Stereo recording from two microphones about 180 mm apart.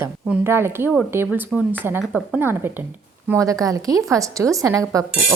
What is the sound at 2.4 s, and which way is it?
A woman's voice, 10° right (ahead or behind).